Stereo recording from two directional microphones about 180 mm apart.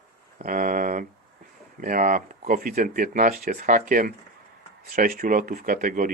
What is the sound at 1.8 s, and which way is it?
Speech, 50° right (ahead or behind).